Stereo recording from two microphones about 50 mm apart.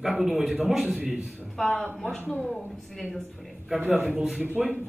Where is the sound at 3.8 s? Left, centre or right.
Right.